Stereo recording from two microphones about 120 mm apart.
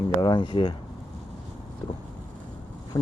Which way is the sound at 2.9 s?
30° left (ahead or behind).